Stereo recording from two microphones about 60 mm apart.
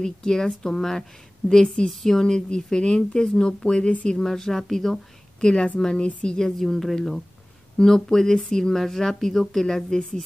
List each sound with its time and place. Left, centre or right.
0.0 s a woman's voice: centre
4.2 s a woman's voice: centre